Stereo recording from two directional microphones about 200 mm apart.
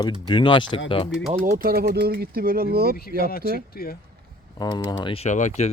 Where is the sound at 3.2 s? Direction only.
50° left (ahead or behind).